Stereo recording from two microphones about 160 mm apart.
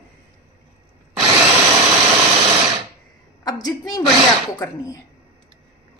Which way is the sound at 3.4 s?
25° left (ahead or behind).